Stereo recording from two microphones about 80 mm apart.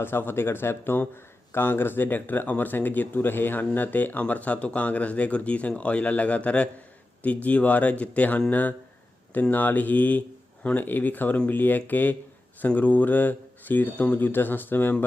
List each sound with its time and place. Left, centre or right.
0.0 s speech: left